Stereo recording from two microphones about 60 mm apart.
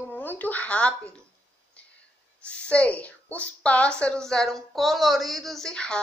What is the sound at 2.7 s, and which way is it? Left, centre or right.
A woman's voice, left.